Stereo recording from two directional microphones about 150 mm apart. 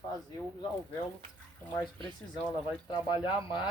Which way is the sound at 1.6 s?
10° left (ahead or behind).